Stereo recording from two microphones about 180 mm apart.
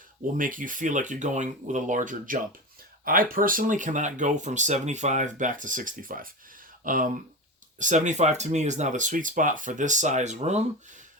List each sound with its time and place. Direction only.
0.3 s speech: 50° right (ahead or behind)